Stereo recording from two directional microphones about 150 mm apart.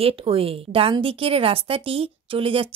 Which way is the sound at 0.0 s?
40° right (ahead or behind).